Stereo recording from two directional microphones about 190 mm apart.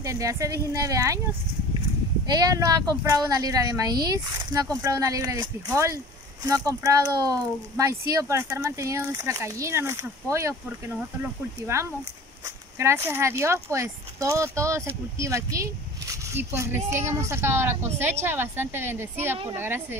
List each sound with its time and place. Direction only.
0.0 s speech: 15° right (ahead or behind)
2.2 s a woman's voice: 20° right (ahead or behind)
11.6 s speech: 15° right (ahead or behind)